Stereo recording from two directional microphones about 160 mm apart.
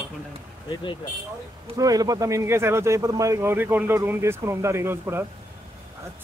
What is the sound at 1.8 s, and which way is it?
Speech, 25° right (ahead or behind).